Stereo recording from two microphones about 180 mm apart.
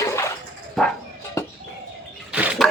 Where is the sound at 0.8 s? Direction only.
Centre (ahead or behind).